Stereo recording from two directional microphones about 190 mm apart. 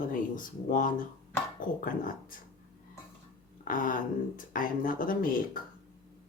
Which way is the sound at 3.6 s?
45° left (ahead or behind).